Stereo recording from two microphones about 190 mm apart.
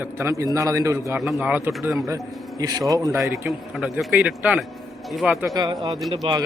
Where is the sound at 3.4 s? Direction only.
Centre (ahead or behind).